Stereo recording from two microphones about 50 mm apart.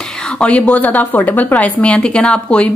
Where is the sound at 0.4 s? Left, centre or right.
Left.